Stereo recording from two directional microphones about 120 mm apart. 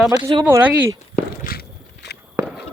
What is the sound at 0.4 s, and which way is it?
Speech, 15° right (ahead or behind).